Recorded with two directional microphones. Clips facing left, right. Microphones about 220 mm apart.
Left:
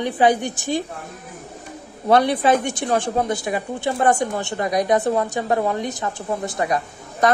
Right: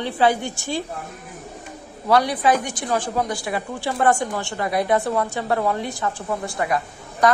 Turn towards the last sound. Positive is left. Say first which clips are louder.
# even
turn(degrees=20)  # may be behind; listen again after turning